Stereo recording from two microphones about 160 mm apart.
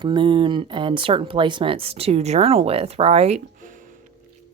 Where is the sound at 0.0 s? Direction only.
30° right (ahead or behind).